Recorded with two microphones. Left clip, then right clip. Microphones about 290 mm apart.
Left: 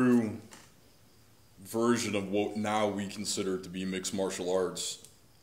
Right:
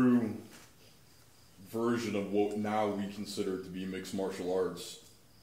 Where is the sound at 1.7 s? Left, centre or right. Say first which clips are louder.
Left 4 dB; left.